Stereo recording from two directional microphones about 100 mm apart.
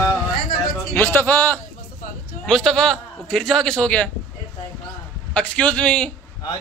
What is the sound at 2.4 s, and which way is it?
A man's voice, 5° left (ahead or behind).